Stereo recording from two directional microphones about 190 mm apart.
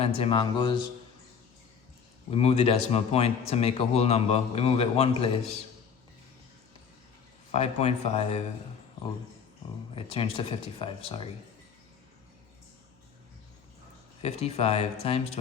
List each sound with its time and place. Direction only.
0.0 s speech: 30° left (ahead or behind)
2.3 s a man's voice: 35° left (ahead or behind)
7.5 s a man's voice: 35° left (ahead or behind)
9.9 s speech: 30° left (ahead or behind)
14.2 s a man's voice: 35° left (ahead or behind)